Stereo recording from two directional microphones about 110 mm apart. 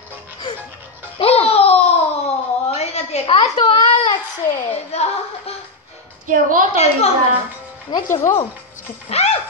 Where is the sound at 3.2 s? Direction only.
65° left (ahead or behind).